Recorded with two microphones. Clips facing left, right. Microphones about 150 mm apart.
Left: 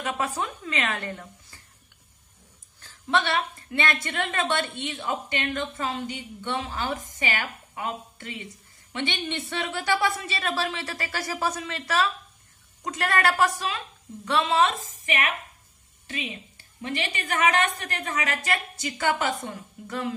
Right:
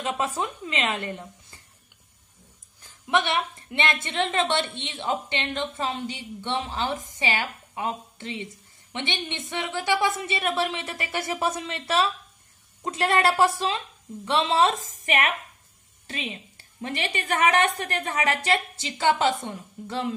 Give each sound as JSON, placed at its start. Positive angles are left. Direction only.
{"t": 0.0, "sound": "a woman's voice", "side_deg": -25}
{"t": 2.8, "sound": "a woman's voice", "side_deg": -15}
{"t": 16.8, "sound": "a woman's voice", "side_deg": -35}